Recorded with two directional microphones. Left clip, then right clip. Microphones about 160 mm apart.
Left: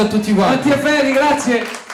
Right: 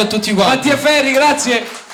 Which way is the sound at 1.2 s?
30° right (ahead or behind).